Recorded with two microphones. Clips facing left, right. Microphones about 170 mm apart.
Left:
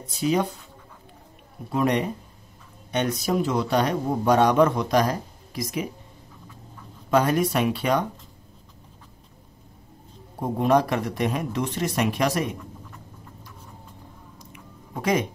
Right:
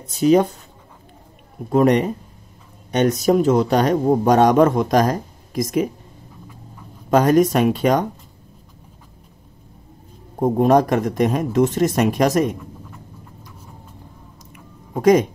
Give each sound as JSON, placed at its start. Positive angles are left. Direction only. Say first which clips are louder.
{"t": 0.2, "sound": "a man's voice", "louder": "right 9 dB", "side_deg": -45}
{"t": 1.7, "sound": "a man's voice", "louder": "right 8 dB", "side_deg": -45}
{"t": 7.1, "sound": "a man's voice", "louder": "right 7 dB", "side_deg": -45}
{"t": 10.4, "sound": "a man's voice", "louder": "right 6 dB", "side_deg": -45}
{"t": 15.0, "sound": "a man's voice", "louder": "right 10 dB", "side_deg": -45}